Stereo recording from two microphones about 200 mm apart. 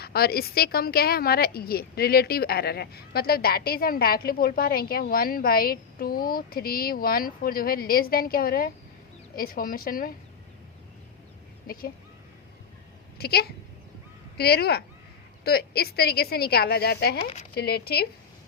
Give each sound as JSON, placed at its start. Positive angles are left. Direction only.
{"t": 0.0, "sound": "a woman's voice", "side_deg": 50}
{"t": 13.1, "sound": "a woman's voice", "side_deg": 50}